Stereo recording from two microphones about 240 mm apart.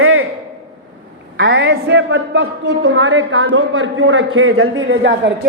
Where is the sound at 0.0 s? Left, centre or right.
Right.